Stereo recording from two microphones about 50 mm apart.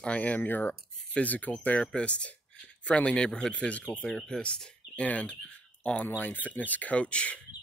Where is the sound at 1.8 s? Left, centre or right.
Left.